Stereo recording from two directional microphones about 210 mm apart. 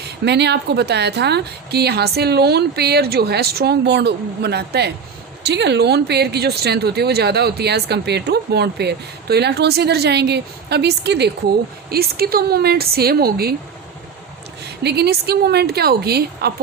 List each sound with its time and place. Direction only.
0.3 s speech: 55° right (ahead or behind)
14.6 s speech: 50° right (ahead or behind)